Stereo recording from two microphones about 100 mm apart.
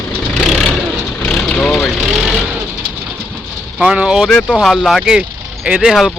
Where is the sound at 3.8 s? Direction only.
10° right (ahead or behind).